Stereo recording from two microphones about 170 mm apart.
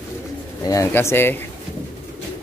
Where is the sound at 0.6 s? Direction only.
20° left (ahead or behind).